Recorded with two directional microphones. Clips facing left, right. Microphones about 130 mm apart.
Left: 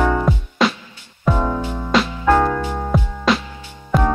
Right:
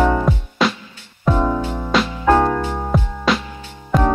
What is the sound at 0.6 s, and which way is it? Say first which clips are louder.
Music: left 1 dB; centre (ahead or behind).